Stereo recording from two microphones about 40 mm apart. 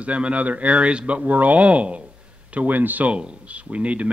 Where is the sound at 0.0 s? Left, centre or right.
Right.